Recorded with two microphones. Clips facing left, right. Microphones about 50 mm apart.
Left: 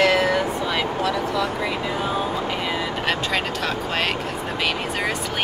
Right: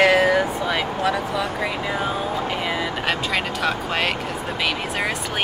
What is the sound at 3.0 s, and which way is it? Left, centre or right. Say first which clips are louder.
Speech: left 1 dB; centre.